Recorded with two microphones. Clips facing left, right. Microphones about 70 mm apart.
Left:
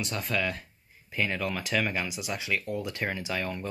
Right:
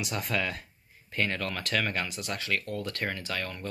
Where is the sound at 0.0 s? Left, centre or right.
Centre.